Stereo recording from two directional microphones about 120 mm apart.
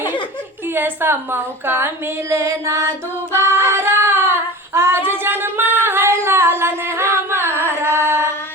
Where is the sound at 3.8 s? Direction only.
20° right (ahead or behind).